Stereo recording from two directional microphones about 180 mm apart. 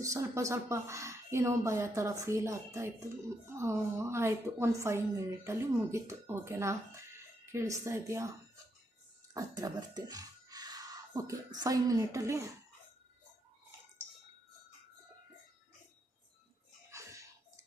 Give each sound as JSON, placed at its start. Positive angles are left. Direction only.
{"t": 0.0, "sound": "speech", "side_deg": -15}
{"t": 9.3, "sound": "speech", "side_deg": -20}
{"t": 16.9, "sound": "bathtub", "side_deg": -15}